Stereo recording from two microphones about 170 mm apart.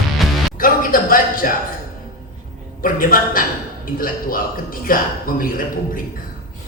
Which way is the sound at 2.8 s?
55° left (ahead or behind).